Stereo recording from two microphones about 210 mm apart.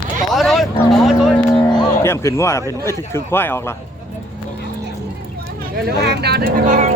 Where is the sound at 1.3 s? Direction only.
20° left (ahead or behind).